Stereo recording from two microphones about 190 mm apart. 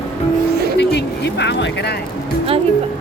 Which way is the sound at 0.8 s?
60° left (ahead or behind).